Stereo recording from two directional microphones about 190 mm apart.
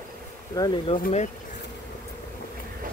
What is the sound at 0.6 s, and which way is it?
Speech, 25° left (ahead or behind).